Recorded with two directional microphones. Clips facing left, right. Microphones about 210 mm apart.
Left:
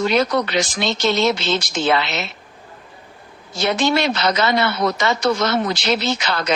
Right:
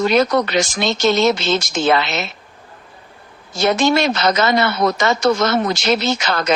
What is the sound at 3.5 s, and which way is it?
A woman's voice, 45° right (ahead or behind).